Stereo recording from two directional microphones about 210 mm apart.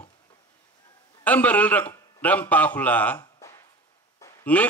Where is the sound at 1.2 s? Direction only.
5° left (ahead or behind).